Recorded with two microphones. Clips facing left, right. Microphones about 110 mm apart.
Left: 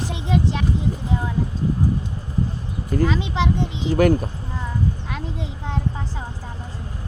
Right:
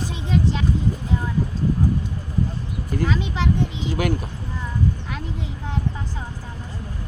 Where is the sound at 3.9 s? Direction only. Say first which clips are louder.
Left 10 dB; 40° left (ahead or behind).